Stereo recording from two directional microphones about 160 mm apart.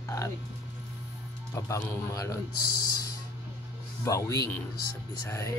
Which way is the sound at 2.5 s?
70° left (ahead or behind).